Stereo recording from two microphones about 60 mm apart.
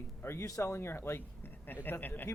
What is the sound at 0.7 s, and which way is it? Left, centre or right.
Speech, left.